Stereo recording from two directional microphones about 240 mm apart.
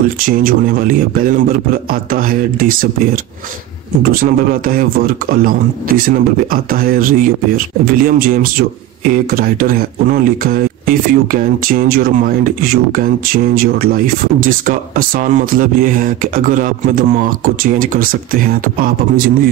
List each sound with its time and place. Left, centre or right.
0.2 s a man's voice: right